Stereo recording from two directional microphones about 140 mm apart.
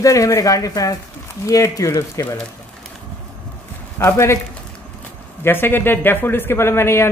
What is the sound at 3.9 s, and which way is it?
Speech, 20° left (ahead or behind).